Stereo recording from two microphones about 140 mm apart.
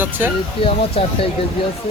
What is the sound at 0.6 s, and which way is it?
Speech, 40° left (ahead or behind).